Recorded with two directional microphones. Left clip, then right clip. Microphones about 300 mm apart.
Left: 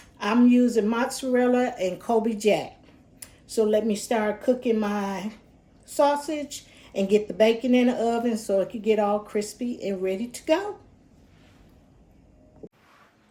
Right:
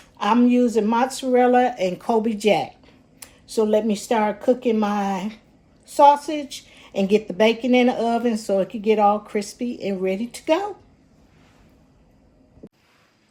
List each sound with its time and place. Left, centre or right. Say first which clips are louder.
0.4 s speech: right 2 dB; right
0.8 s a woman's voice: right 4 dB; centre
3.7 s a woman's voice: right 3 dB; centre